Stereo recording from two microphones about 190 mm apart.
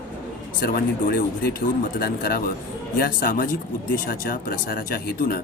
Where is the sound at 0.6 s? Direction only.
50° left (ahead or behind).